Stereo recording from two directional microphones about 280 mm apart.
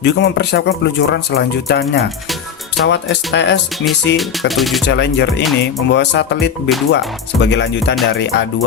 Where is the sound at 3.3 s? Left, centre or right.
Left.